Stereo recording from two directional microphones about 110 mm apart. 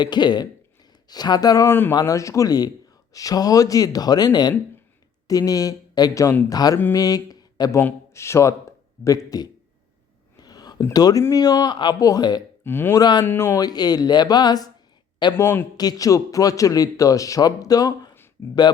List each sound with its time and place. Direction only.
0.0 s a man's voice: 40° left (ahead or behind)
7.8 s a man's voice: 20° left (ahead or behind)
10.3 s a sound: 35° left (ahead or behind)
10.9 s a man's voice: 35° left (ahead or behind)
12.6 s speech: 20° left (ahead or behind)
13.0 s a man's voice: 40° left (ahead or behind)
13.2 s speech: 20° left (ahead or behind)
13.6 s a man's voice: 35° left (ahead or behind)
15.4 s speech: 20° left (ahead or behind)
15.8 s a man's voice: 35° left (ahead or behind)
18.4 s speech: 20° left (ahead or behind)